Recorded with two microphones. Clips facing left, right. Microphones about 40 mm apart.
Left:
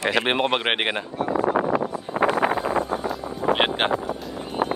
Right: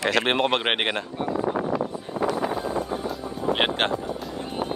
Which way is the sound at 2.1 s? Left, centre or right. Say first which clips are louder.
Left 5 dB; left.